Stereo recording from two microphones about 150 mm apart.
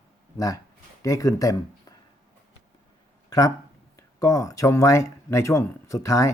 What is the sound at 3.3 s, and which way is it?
A man's voice, 25° left (ahead or behind).